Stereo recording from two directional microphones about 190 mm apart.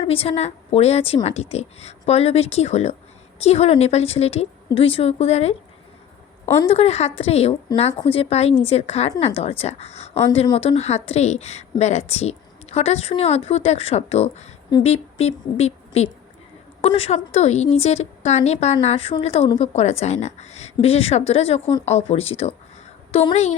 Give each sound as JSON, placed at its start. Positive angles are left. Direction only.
{"t": 0.0, "sound": "a woman's voice", "side_deg": 30}
{"t": 6.7, "sound": "a woman's voice", "side_deg": 35}